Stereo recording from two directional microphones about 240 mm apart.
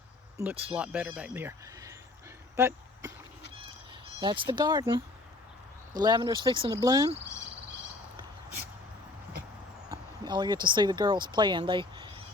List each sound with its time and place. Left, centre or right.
0.7 s speech: centre
2.6 s a sound: centre
4.2 s speech: centre
9.9 s speech: centre